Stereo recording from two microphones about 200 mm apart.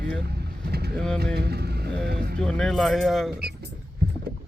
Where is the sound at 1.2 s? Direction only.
55° right (ahead or behind).